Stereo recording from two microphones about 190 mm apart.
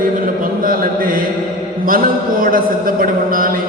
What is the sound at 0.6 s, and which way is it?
Mantra, 50° right (ahead or behind).